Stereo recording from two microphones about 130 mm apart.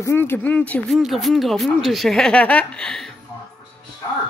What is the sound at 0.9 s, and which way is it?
Speech, centre (ahead or behind).